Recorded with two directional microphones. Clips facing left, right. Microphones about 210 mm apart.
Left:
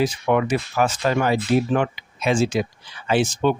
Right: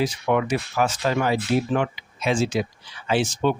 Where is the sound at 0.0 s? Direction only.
50° left (ahead or behind).